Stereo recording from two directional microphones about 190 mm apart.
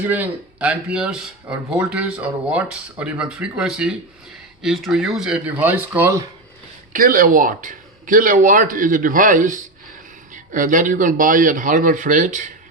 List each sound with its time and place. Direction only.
0.0 s speech: 10° right (ahead or behind)
6.9 s speech: 50° right (ahead or behind)